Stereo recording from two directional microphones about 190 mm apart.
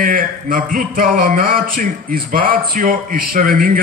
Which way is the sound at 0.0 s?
45° right (ahead or behind).